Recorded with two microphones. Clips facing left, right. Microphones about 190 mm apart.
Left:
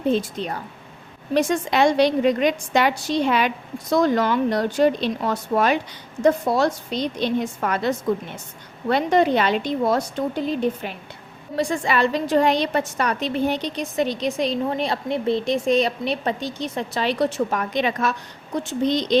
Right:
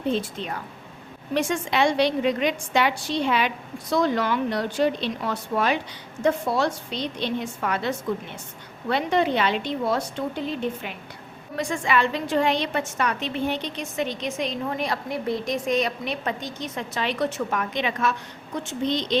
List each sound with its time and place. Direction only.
0.2 s a woman's voice: 40° left (ahead or behind)